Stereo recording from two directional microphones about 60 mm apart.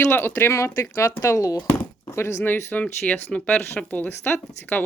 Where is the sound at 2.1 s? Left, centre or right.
Left.